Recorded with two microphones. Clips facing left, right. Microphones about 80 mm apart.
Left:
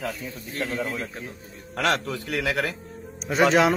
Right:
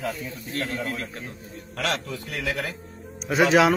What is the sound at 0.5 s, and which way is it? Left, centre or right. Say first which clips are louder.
Speech: left 1 dB; centre.